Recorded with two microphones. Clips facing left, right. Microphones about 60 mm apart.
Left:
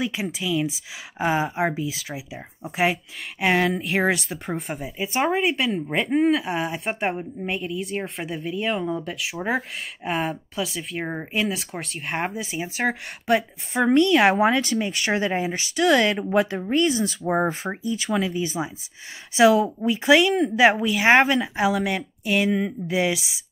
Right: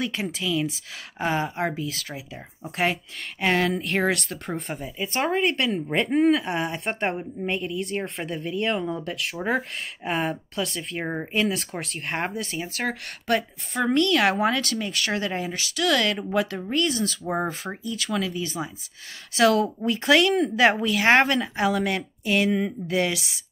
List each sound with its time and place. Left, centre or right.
0.0 s speech: centre